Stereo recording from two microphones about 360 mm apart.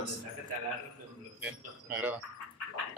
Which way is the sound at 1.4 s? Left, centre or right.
Centre.